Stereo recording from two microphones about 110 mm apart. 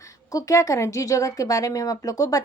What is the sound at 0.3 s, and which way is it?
Speech, 30° left (ahead or behind).